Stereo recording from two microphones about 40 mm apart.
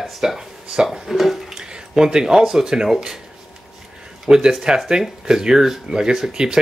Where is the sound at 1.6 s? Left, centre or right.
Centre.